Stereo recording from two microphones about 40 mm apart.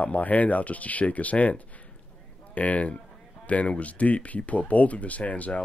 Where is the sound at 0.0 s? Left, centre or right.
Left.